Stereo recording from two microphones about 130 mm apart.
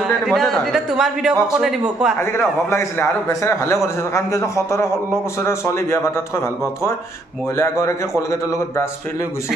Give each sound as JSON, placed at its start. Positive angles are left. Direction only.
{"t": 0.0, "sound": "a man's voice", "side_deg": 0}
{"t": 2.1, "sound": "a man's voice", "side_deg": 20}
{"t": 7.5, "sound": "a man's voice", "side_deg": 20}